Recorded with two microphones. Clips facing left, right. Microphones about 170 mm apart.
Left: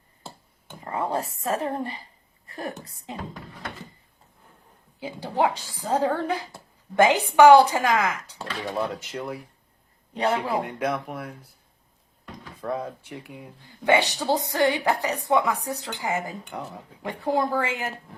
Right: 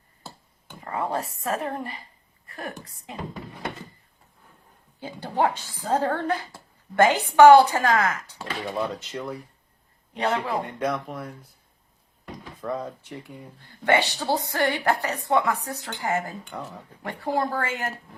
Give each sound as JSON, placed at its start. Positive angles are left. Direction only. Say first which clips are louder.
{"t": 0.9, "sound": "a woman's voice", "louder": "left 1 dB", "side_deg": 25}
{"t": 4.9, "sound": "a woman's voice", "louder": "even", "side_deg": 10}
{"t": 10.5, "sound": "speech", "louder": "left 1 dB", "side_deg": 5}
{"t": 12.6, "sound": "a woman's voice", "louder": "left 1 dB", "side_deg": 10}